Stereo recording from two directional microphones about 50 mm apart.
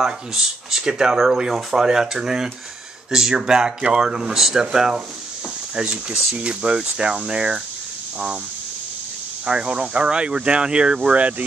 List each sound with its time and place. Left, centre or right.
0.0 s speech: centre
9.5 s speech: right
11.0 s speech: right